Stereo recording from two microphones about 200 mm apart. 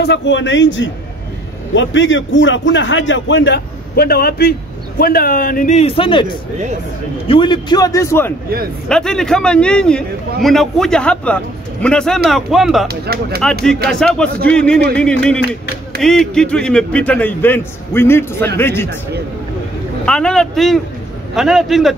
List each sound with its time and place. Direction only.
0.0 s a man's voice: 60° left (ahead or behind); by 6.2 s 25° left (ahead or behind)
7.2 s a man's voice: 25° left (ahead or behind)
8.8 s a man's voice: 5° left (ahead or behind)
12.8 s speech: 50° right (ahead or behind)
13.8 s a man's voice: 5° left (ahead or behind)
20.1 s a man's voice: 5° left (ahead or behind)